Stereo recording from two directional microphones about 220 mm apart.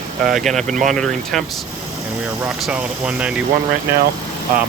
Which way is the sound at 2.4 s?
5° right (ahead or behind).